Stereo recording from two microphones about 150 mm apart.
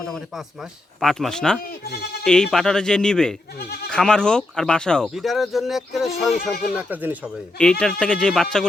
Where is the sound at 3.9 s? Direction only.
5° left (ahead or behind).